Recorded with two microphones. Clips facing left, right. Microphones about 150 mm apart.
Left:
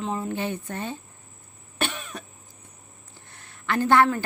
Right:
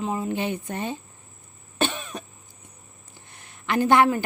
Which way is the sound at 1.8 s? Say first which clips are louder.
Right 4 dB; 25° right (ahead or behind).